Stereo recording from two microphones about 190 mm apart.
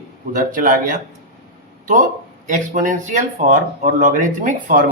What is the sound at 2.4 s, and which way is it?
Speech, 40° right (ahead or behind).